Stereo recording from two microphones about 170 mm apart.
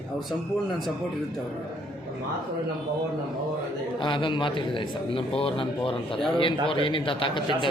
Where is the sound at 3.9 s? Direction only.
30° left (ahead or behind).